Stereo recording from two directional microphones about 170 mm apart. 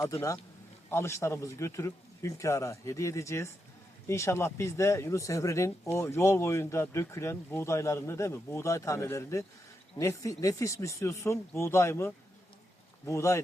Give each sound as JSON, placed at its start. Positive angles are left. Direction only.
{"t": 0.0, "sound": "a man's voice", "side_deg": 20}